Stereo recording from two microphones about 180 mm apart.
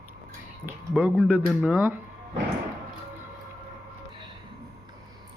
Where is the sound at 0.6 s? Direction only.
10° right (ahead or behind).